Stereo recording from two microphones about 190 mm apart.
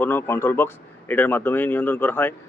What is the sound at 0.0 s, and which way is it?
Speech, 10° left (ahead or behind).